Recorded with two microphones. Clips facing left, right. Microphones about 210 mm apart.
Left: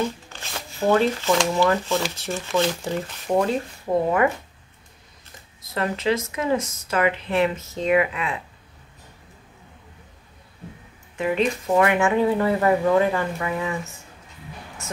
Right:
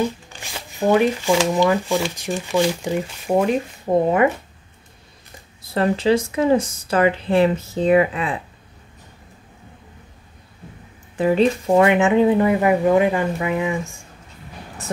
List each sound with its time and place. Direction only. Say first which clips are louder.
0.0 s speech: right 3 dB; 15° right (ahead or behind)
5.6 s speech: right 6 dB; 30° right (ahead or behind)
11.1 s speech: right 6 dB; 35° right (ahead or behind); by 13.9 s 15° right (ahead or behind)